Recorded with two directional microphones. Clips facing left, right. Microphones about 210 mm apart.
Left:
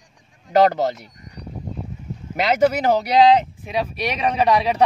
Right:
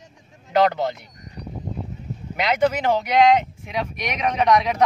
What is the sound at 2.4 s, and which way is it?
Speech, 40° left (ahead or behind).